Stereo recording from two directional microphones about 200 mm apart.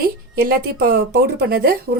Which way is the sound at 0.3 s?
50° right (ahead or behind).